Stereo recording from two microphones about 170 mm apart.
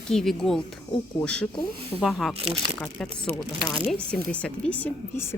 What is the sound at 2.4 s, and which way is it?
Speech, 30° right (ahead or behind).